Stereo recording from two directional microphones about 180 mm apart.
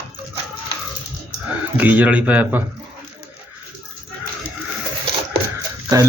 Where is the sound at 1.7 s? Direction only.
10° right (ahead or behind).